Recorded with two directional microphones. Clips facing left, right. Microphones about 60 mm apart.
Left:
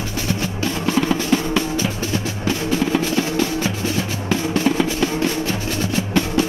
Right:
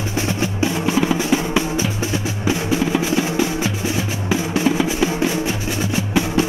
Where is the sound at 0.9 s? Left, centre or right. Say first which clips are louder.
Even; centre.